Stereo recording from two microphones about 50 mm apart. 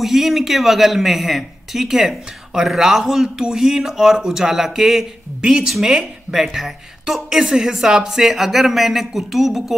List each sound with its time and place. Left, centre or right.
0.0 s speech: centre
5.4 s a woman's voice: centre